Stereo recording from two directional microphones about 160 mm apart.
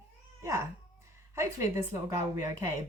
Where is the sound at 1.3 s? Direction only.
20° right (ahead or behind).